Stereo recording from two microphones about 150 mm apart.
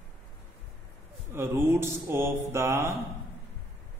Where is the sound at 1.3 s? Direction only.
15° right (ahead or behind).